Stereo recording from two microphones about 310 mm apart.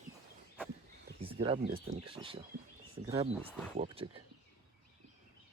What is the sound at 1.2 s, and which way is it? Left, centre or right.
Speech, centre.